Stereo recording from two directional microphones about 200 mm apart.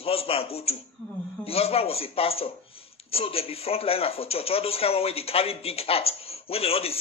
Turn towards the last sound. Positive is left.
turn(degrees=30)  # may be behind; listen again after turning